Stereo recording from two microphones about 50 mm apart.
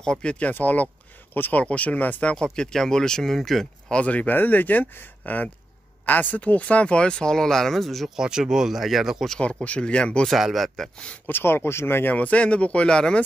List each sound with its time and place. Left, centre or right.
0.0 s speech: centre
0.5 s speech: left
1.6 s speech: left
2.3 s speech: centre
3.9 s speech: left
4.4 s speech: left; by 8.1 s centre
8.2 s speech: centre
9.4 s speech: left
10.4 s speech: centre
11.2 s speech: left
12.1 s speech: left